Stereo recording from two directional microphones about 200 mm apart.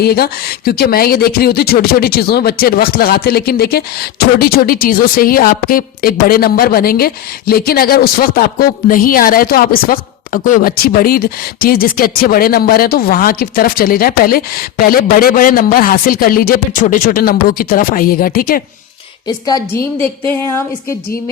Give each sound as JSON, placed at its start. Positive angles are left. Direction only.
{"t": 0.0, "sound": "a woman's voice", "side_deg": 50}
{"t": 19.5, "sound": "a woman's voice", "side_deg": 20}